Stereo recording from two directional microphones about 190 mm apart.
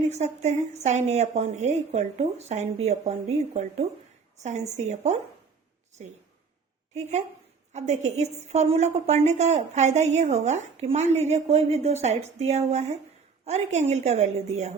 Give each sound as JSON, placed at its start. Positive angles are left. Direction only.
{"t": 0.1, "sound": "a woman's voice", "side_deg": -35}
{"t": 7.7, "sound": "a woman's voice", "side_deg": -35}